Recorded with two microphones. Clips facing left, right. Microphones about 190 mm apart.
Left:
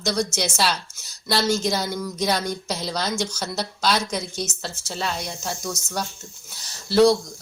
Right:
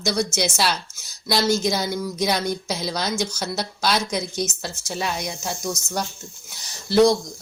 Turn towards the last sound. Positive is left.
turn(degrees=-15)  # may be behind; listen again after turning